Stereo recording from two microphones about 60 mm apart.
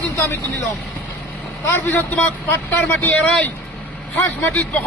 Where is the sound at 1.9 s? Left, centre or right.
Left.